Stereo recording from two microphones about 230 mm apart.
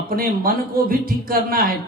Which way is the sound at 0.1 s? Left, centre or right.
Right.